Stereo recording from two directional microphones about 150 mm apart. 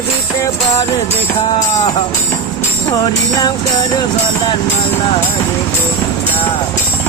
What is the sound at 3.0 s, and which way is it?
Music, 25° left (ahead or behind).